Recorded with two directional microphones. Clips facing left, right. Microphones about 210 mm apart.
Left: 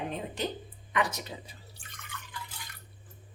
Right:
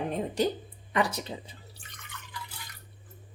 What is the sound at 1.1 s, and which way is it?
Speech, 30° right (ahead or behind).